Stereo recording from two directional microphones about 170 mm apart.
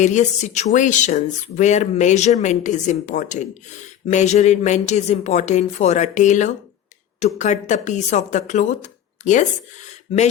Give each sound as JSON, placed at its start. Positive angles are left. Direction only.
{"t": 0.0, "sound": "speech", "side_deg": 45}